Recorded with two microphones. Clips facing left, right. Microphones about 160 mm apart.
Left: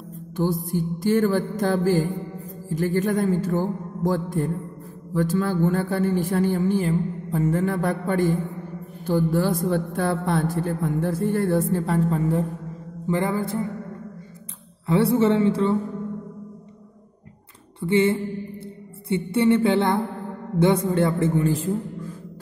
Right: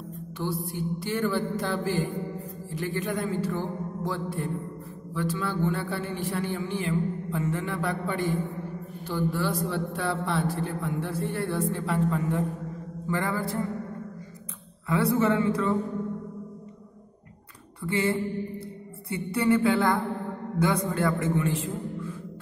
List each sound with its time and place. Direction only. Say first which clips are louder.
0.4 s a woman's voice: left 7 dB; 45° left (ahead or behind)
13.0 s a man's voice: left 5 dB; 20° left (ahead or behind)
14.9 s a man's voice: left 5 dB; 30° left (ahead or behind)
17.7 s a sound: left 7 dB; 25° left (ahead or behind)
19.0 s a man's voice: left 5 dB; 25° left (ahead or behind)